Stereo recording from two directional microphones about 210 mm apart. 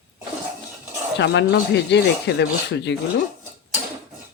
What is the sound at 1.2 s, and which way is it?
Speech, 55° left (ahead or behind).